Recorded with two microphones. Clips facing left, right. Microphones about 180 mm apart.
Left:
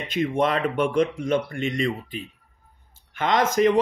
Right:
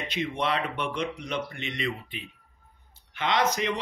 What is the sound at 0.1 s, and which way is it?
A man's voice, 50° left (ahead or behind).